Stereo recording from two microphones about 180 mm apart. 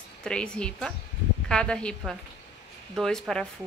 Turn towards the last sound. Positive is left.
turn(degrees=5)  # may be behind; listen again after turning